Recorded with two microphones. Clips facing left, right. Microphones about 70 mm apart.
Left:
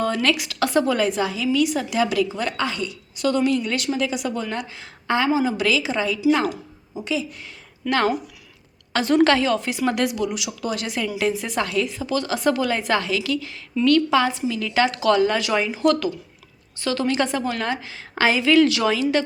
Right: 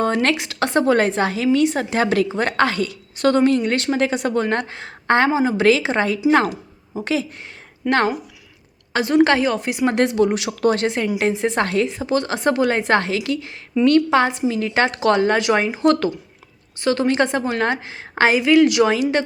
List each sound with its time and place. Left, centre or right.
0.0 s a woman's voice: right
1.5 s a woman's voice: right
5.3 s a woman's voice: right
7.0 s a woman's voice: right
7.9 s a woman's voice: right
8.9 s a woman's voice: centre; by 10.1 s right
10.2 s a woman's voice: right
10.8 s a woman's voice: right
11.6 s a woman's voice: right
11.9 s a woman's voice: right